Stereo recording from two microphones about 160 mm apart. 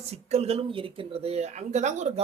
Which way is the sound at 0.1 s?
40° right (ahead or behind).